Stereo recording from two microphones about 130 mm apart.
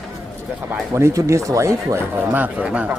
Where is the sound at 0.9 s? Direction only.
25° right (ahead or behind).